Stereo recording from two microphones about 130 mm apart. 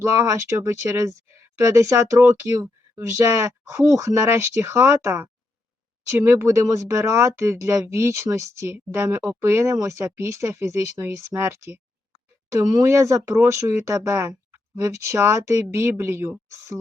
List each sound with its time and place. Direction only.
0.2 s speech: 25° right (ahead or behind)